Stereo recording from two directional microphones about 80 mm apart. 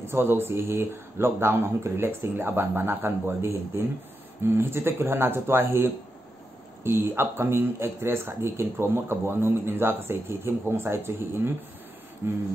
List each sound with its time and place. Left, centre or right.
0.1 s speech: right